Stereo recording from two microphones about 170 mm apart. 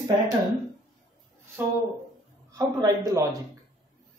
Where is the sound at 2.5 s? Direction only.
20° right (ahead or behind).